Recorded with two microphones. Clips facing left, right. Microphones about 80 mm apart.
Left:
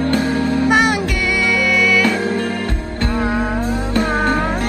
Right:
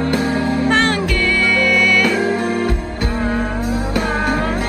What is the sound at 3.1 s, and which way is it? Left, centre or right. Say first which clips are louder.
Music: left 1 dB; centre.